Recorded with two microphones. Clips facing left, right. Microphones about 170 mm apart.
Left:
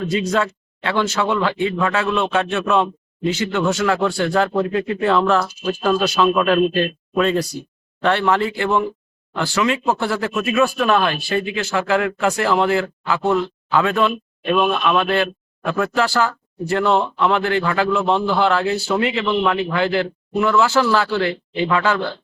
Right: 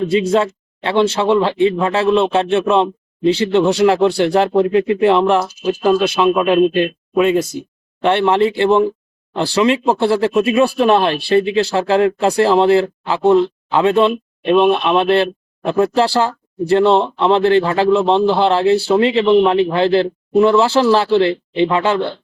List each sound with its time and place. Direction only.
0.0 s speech: 25° right (ahead or behind)